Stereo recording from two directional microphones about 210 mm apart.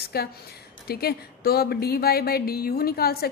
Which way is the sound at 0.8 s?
45° left (ahead or behind).